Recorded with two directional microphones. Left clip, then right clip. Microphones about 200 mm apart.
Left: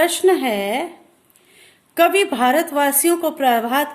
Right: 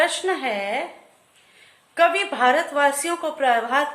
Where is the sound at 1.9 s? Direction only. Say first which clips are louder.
Left 4 dB; 50° left (ahead or behind).